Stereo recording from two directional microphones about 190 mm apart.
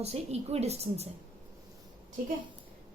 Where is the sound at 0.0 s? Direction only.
35° right (ahead or behind).